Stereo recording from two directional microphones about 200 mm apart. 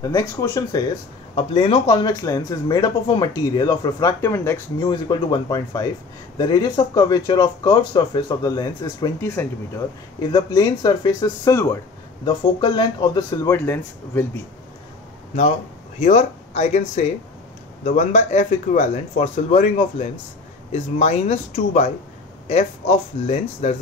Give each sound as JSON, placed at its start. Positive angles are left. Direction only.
{"t": 0.0, "sound": "speech", "side_deg": 15}
{"t": 10.3, "sound": "speech", "side_deg": 20}
{"t": 16.0, "sound": "speech", "side_deg": 35}